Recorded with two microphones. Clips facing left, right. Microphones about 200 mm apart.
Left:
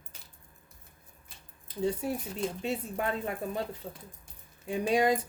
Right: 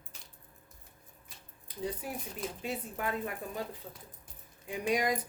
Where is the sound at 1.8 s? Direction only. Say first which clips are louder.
Left 7 dB; 25° left (ahead or behind).